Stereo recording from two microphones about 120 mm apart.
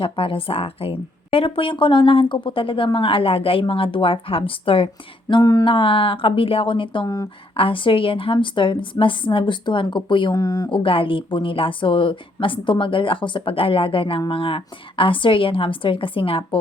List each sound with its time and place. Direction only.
0.0 s speech: 50° left (ahead or behind)
5.4 s speech: 30° left (ahead or behind)
5.6 s speech: 45° left (ahead or behind)
10.3 s speech: 30° left (ahead or behind)
10.7 s speech: 45° left (ahead or behind)